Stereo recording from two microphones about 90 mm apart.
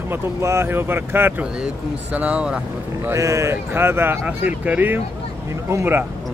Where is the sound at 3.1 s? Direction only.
35° right (ahead or behind).